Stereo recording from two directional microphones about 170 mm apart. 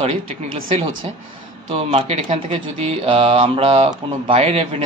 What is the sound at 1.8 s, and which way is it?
Speech, 35° right (ahead or behind).